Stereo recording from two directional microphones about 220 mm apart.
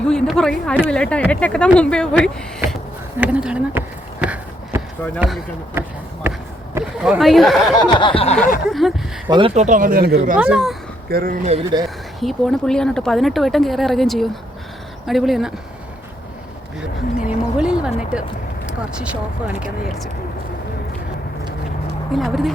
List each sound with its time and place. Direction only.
0.0 s speech: 5° left (ahead or behind)
3.2 s a sound: 5° right (ahead or behind)
5.2 s speech: 5° right (ahead or behind)
7.8 s a sound: 20° left (ahead or behind)
8.7 s speech: centre (ahead or behind)
9.3 s speech: 25° right (ahead or behind)
10.3 s speech: 5° right (ahead or behind)
11.1 s speech: 40° right (ahead or behind)
11.5 s speech: 20° right (ahead or behind)
12.2 s speech: centre (ahead or behind)
17.2 s a sound: 5° right (ahead or behind)
22.1 s speech: centre (ahead or behind)